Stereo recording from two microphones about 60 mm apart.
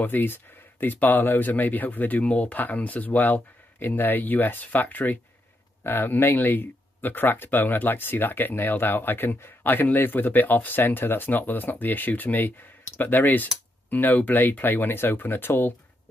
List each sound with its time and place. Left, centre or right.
0.0 s speech: left